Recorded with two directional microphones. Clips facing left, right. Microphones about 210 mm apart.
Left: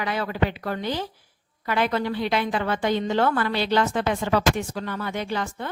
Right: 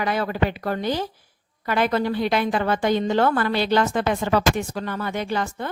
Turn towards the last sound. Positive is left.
turn(degrees=-45)  # may be behind; listen again after turning